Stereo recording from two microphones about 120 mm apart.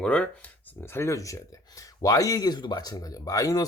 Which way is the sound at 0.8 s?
20° left (ahead or behind).